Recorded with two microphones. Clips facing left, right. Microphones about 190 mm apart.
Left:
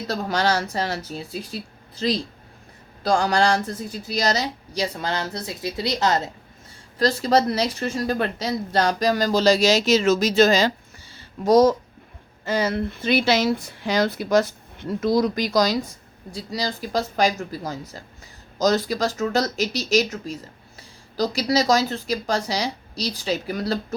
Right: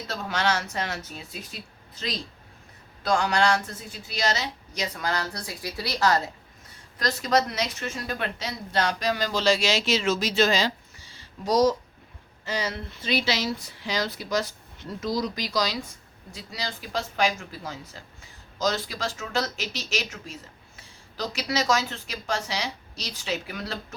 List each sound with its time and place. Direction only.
0.1 s speech: 35° left (ahead or behind)